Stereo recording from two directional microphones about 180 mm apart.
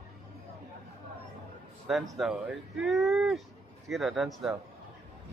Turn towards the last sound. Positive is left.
turn(degrees=0)  # may be behind; listen again after turning